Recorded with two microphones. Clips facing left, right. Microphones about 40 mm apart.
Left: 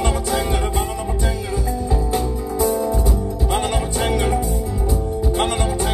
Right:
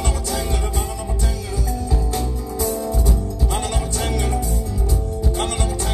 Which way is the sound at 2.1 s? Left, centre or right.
Centre.